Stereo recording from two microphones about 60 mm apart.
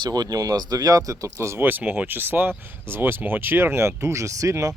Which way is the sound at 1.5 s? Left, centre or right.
Right.